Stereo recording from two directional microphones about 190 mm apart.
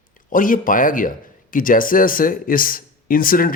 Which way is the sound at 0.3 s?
45° left (ahead or behind).